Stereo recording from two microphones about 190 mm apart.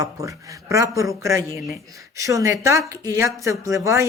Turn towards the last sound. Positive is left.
turn(degrees=-15)  # may be behind; listen again after turning